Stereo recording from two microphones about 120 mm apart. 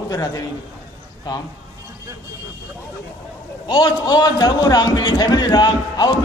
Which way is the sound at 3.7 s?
35° left (ahead or behind).